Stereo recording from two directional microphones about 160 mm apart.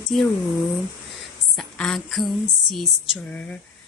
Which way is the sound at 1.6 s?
5° left (ahead or behind).